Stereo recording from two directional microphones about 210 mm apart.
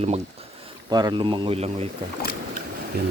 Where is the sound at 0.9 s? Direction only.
20° right (ahead or behind).